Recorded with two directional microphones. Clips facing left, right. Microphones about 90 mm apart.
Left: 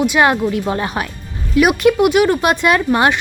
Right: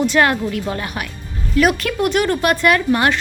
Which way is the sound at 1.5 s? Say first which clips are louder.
Left 4 dB; 10° left (ahead or behind).